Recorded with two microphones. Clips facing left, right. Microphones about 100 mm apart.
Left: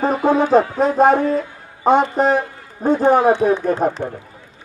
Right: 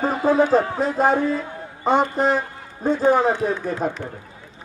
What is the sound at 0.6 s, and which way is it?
A man's voice, 55° left (ahead or behind).